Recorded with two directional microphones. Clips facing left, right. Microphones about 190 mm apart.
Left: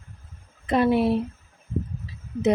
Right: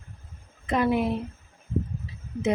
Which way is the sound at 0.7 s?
30° left (ahead or behind).